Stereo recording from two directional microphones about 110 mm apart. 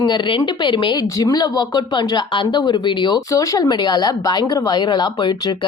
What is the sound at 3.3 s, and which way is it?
Speech, 30° left (ahead or behind).